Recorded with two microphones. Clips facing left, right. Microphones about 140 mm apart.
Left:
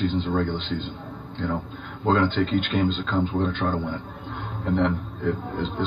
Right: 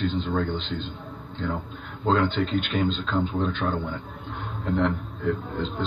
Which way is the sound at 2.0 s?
55° left (ahead or behind).